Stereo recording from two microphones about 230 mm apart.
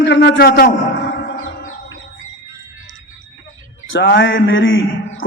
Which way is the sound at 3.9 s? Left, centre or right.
Left.